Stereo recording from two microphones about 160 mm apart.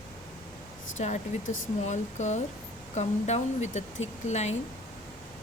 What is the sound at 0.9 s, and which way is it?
Speech, 50° left (ahead or behind).